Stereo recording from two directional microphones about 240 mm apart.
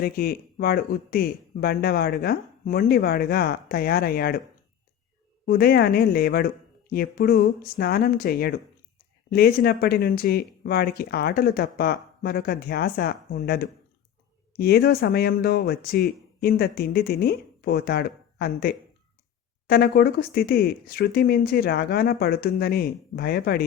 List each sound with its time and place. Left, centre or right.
0.0 s speech: left
5.5 s speech: left